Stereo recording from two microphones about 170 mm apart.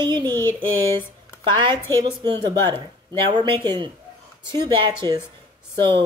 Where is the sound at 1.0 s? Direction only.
30° right (ahead or behind).